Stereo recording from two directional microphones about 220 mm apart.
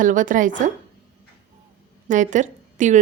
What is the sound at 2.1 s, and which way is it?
Speech, 35° right (ahead or behind).